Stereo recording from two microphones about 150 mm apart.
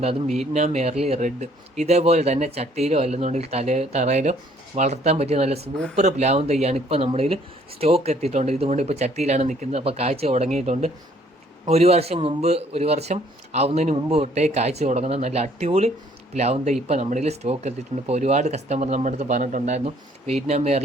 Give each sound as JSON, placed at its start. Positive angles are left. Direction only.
{"t": 0.5, "sound": "speech", "side_deg": -50}